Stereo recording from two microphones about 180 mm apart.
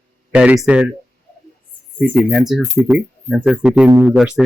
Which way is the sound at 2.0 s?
Centre (ahead or behind).